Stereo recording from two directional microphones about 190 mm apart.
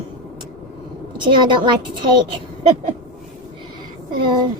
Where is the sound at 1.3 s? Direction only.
25° right (ahead or behind).